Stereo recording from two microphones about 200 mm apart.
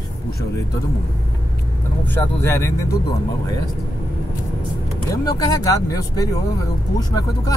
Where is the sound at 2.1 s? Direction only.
10° left (ahead or behind).